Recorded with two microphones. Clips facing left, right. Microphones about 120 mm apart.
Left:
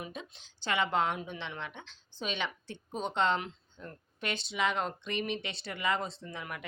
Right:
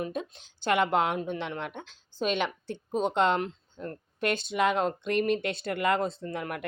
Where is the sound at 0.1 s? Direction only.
50° right (ahead or behind).